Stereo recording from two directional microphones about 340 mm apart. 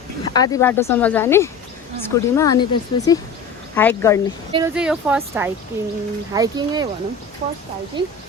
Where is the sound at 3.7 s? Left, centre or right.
Centre.